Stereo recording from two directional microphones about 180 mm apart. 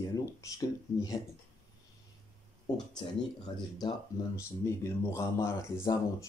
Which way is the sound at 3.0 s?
25° left (ahead or behind).